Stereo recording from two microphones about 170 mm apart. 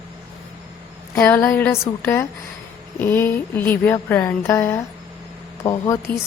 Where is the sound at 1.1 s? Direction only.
5° left (ahead or behind).